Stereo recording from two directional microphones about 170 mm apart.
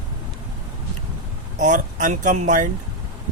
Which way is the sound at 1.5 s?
45° right (ahead or behind).